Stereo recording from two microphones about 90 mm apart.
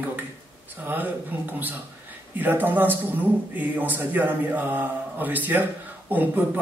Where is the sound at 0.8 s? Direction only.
20° right (ahead or behind).